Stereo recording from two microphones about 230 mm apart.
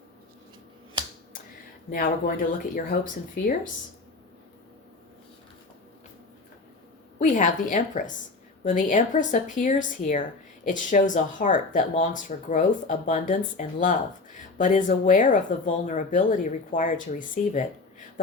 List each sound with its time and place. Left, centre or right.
1.9 s speech: left
7.2 s speech: left